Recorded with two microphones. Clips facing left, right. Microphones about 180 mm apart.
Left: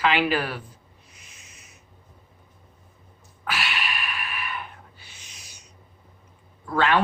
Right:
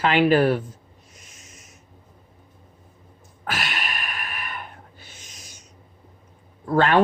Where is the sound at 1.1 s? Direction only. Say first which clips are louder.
Right 5 dB; 45° right (ahead or behind).